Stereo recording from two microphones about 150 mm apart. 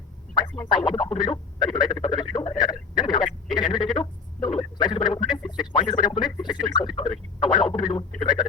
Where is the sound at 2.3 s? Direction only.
30° left (ahead or behind).